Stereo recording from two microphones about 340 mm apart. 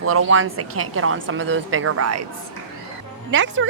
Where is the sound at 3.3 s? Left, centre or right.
Right.